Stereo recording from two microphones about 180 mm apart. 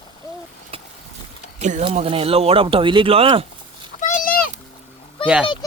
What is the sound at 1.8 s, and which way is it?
Speech, 30° right (ahead or behind).